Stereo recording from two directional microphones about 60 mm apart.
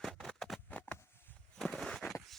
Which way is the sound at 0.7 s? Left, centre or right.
Left.